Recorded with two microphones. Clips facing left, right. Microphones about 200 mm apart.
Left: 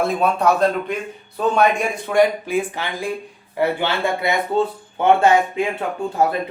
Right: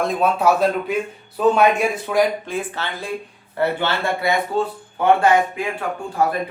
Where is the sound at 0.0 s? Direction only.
Centre (ahead or behind).